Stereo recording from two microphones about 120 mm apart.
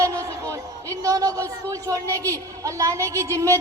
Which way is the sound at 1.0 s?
30° right (ahead or behind).